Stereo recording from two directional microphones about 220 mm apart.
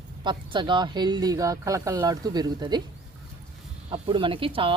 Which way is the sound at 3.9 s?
25° right (ahead or behind).